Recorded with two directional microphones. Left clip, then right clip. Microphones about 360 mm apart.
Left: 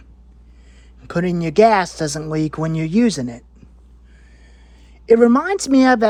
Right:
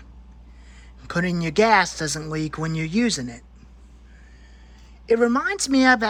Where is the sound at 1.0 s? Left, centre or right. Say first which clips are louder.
Left 4 dB; centre.